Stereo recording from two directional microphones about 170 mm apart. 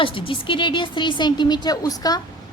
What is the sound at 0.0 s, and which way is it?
A woman's voice, 30° left (ahead or behind).